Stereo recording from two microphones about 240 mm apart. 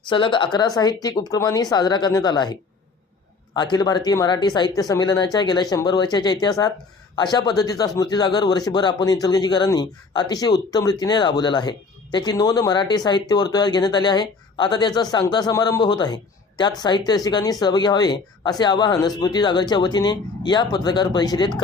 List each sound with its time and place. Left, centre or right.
0.1 s a woman's voice: centre